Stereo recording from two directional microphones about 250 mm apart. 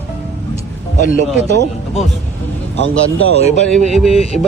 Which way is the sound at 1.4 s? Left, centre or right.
Right.